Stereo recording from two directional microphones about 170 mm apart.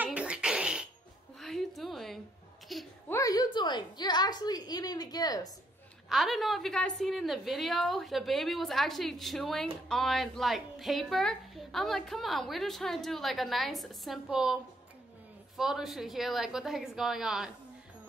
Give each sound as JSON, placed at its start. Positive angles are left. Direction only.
{"t": 0.0, "sound": "fart", "side_deg": -5}
{"t": 1.4, "sound": "a sound", "side_deg": 0}
{"t": 3.1, "sound": "a woman's voice", "side_deg": 20}
{"t": 6.0, "sound": "a woman's voice", "side_deg": 0}